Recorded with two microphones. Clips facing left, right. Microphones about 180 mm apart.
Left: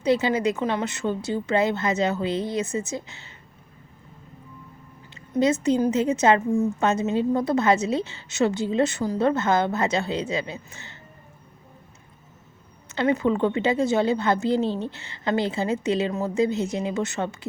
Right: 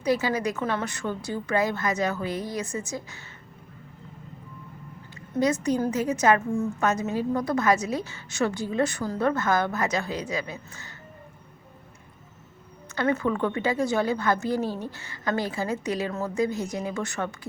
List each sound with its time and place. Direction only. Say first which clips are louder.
0.0 s a woman's voice: left 3 dB; 25° left (ahead or behind)
5.1 s a woman's voice: left 3 dB; 25° left (ahead or behind)
12.9 s a woman's voice: left 3 dB; 20° left (ahead or behind)